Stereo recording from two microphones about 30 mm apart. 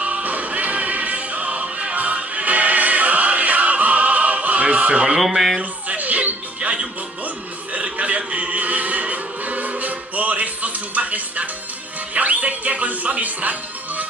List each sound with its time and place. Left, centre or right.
0.0 s music: right
5.1 s speech: centre
5.6 s a sound: right
6.6 s music: right
7.7 s a sound: right
8.4 s music: right
12.1 s speech: right